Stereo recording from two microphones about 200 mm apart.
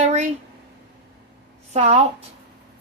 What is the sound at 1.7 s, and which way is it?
Speech, 35° right (ahead or behind).